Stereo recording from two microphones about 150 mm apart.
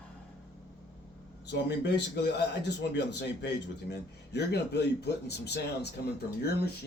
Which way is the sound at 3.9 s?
90° left.